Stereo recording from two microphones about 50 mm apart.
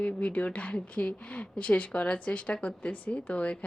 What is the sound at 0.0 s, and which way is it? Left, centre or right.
Speech, left.